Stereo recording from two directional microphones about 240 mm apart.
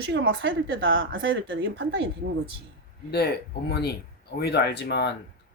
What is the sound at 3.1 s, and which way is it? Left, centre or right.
Speech, left.